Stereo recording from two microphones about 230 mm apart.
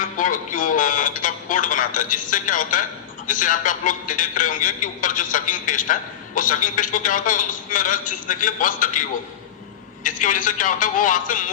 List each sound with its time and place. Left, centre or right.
0.0 s speech: left